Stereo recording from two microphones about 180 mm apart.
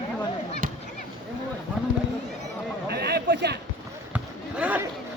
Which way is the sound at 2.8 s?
65° right (ahead or behind).